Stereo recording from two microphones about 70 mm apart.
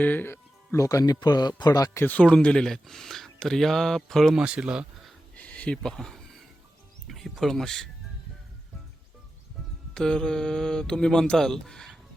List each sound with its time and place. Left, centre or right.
0.0 s speech: left
0.3 s music: left
1.0 s speech: left
2.0 s speech: centre
4.4 s speech: centre
5.3 s a sound: centre
7.1 s speech: centre
9.9 s speech: centre